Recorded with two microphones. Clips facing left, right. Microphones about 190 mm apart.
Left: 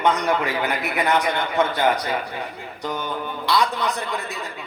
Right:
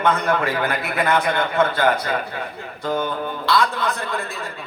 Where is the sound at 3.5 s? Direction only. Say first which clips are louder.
Right 1 dB; 15° left (ahead or behind).